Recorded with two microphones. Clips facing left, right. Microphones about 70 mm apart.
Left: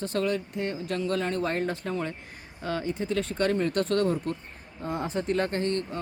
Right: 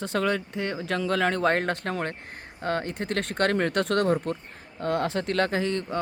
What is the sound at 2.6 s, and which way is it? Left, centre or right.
Speech, right.